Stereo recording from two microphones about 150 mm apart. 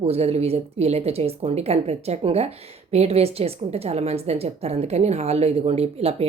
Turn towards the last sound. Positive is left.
turn(degrees=-45)  # may be behind; listen again after turning